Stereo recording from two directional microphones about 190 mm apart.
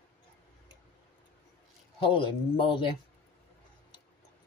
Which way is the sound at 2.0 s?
25° left (ahead or behind).